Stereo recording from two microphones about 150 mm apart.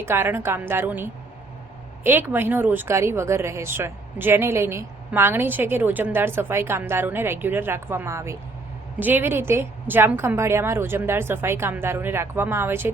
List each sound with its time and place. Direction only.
0.0 s speech: 15° right (ahead or behind)